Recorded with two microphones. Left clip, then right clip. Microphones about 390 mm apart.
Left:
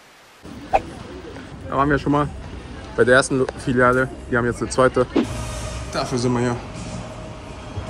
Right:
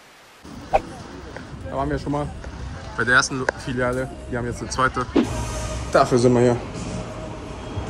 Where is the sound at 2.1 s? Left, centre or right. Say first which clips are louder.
Left 6 dB; left.